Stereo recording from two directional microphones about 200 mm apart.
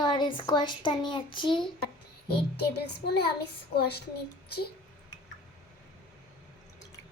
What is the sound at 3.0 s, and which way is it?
A child's voice, 55° left (ahead or behind).